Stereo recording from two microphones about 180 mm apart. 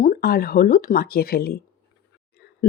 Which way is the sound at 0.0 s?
55° left (ahead or behind).